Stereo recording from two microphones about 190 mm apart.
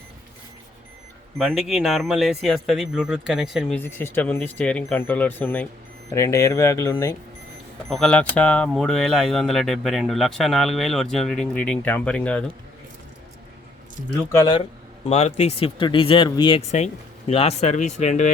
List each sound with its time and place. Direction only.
1.4 s speech: centre (ahead or behind)
3.8 s speech: 15° left (ahead or behind)
7.9 s speech: centre (ahead or behind)
14.3 s speech: 25° left (ahead or behind)
16.7 s speech: 35° left (ahead or behind)